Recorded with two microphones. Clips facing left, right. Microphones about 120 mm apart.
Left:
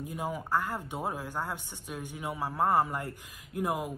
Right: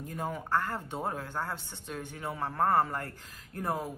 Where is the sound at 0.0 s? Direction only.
10° left (ahead or behind).